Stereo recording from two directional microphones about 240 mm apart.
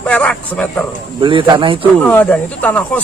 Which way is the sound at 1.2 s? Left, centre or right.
Right.